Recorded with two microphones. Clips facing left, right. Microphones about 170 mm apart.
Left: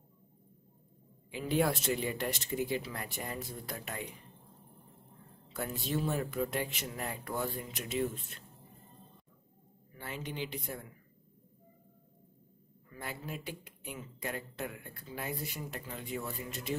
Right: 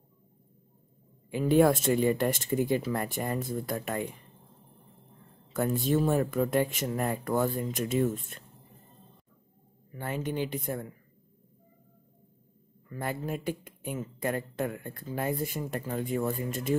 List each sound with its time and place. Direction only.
1.3 s speech: 50° right (ahead or behind)
5.5 s speech: 50° right (ahead or behind)
9.9 s speech: 50° right (ahead or behind)
12.9 s speech: 50° right (ahead or behind)